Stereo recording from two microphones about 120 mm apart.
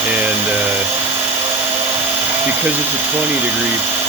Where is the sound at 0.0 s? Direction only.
15° right (ahead or behind).